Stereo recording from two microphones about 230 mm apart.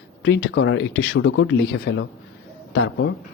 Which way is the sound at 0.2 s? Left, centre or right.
Left.